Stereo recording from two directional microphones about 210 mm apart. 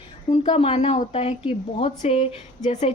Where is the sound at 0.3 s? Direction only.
25° left (ahead or behind).